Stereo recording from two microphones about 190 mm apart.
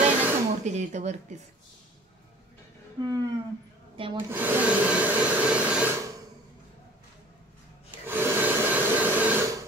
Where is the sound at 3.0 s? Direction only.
20° right (ahead or behind).